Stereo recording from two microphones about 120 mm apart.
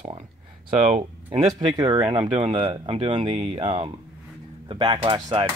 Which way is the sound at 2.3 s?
45° right (ahead or behind).